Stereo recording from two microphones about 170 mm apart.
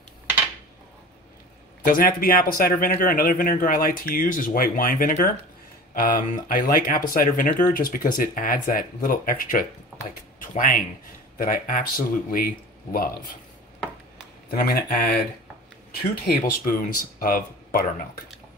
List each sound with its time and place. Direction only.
1.9 s speech: 55° left (ahead or behind)
14.5 s speech: 60° left (ahead or behind)